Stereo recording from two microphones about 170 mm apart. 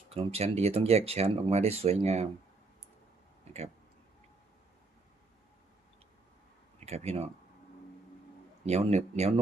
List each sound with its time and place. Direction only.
0.1 s speech: 35° right (ahead or behind)
6.7 s speech: 40° right (ahead or behind)
8.6 s speech: 40° right (ahead or behind)